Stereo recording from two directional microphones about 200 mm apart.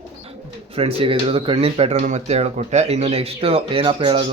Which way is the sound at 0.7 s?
30° right (ahead or behind).